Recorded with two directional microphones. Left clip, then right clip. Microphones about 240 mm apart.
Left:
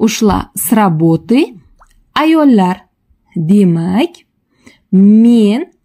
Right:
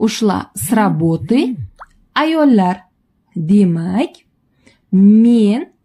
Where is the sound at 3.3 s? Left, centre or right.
Left.